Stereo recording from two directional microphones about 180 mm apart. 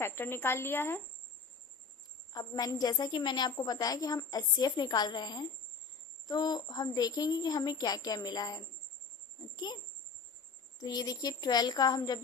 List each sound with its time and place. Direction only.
0.0 s speech: 15° left (ahead or behind)
2.3 s a woman's voice: 20° left (ahead or behind)
9.7 s a woman's voice: 25° left (ahead or behind)